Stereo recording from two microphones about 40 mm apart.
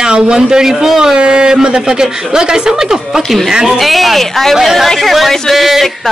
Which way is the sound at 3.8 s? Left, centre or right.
Centre.